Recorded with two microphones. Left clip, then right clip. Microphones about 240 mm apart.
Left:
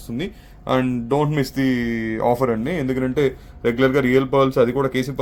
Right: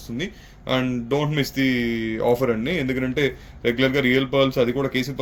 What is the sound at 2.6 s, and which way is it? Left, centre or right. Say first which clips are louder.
A man's voice: left 1 dB; left.